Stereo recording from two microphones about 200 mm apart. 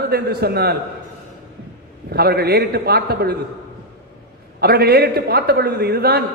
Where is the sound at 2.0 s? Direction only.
50° right (ahead or behind).